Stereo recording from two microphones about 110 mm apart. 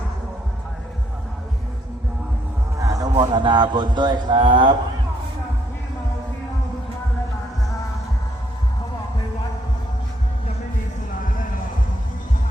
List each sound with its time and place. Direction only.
2.7 s a man's voice: 30° right (ahead or behind); by 4.7 s 45° right (ahead or behind)